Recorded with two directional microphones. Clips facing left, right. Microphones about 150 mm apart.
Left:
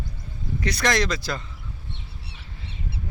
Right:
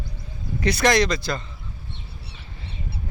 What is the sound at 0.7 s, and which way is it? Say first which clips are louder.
Speech: right 4 dB; centre (ahead or behind).